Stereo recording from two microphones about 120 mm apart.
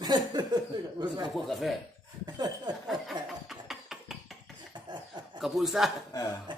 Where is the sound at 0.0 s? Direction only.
35° right (ahead or behind).